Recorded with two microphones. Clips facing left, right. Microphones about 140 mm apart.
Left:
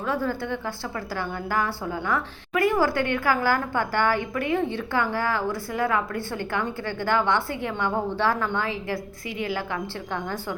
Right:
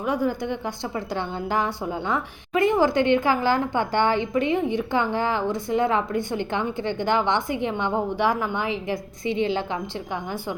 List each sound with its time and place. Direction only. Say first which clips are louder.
0.0 s a woman's voice: right 3 dB; 15° right (ahead or behind)